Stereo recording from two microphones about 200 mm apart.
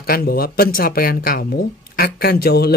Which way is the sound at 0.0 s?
50° left (ahead or behind).